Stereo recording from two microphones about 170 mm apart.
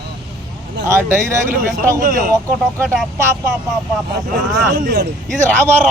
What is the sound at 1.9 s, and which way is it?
Speech, 55° right (ahead or behind).